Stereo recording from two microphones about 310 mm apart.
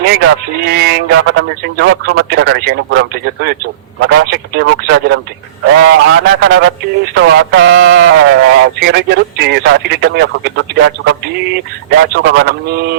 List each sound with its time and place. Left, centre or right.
0.0 s a man's voice: right